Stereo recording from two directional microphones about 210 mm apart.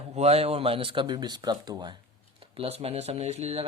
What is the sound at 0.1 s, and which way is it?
Speech, 30° right (ahead or behind).